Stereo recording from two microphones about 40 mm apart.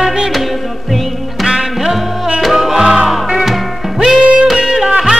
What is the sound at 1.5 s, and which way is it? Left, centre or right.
Music, centre.